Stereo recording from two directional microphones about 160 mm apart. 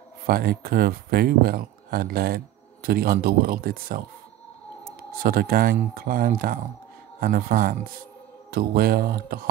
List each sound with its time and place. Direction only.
0.3 s speech: 70° right (ahead or behind)
5.2 s speech: 65° right (ahead or behind)